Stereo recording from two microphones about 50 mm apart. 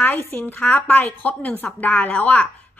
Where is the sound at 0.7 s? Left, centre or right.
Left.